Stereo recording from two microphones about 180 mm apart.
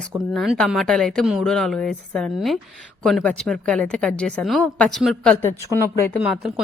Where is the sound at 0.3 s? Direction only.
Centre (ahead or behind).